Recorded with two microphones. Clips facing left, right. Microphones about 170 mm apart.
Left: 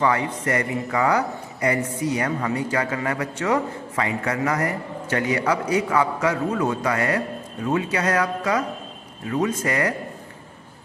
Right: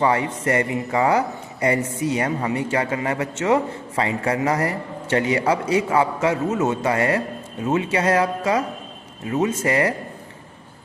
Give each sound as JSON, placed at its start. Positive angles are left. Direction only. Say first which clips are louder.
{"t": 0.0, "sound": "a man's voice", "louder": "right 2 dB", "side_deg": -25}